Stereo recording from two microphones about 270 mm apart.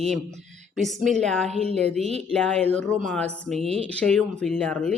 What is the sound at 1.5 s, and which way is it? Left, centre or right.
Speech, right.